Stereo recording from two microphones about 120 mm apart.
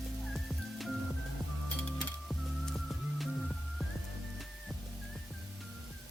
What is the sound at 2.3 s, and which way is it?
Music, centre (ahead or behind).